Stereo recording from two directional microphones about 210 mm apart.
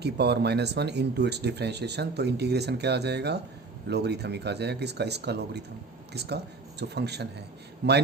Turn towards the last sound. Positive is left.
turn(degrees=-50)  # may be behind; listen again after turning